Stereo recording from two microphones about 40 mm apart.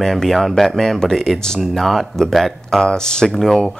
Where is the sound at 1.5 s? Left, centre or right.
Centre.